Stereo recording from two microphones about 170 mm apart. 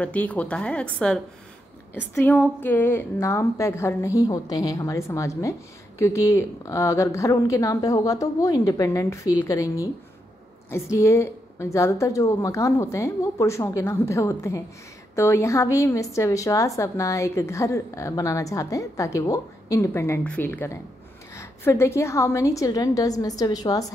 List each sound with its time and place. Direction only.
0.0 s a woman's voice: 10° left (ahead or behind)